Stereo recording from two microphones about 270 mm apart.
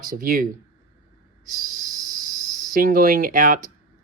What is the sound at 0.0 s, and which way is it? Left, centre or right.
Speech, right.